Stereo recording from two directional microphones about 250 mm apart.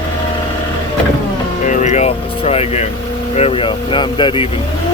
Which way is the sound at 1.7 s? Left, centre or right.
Left.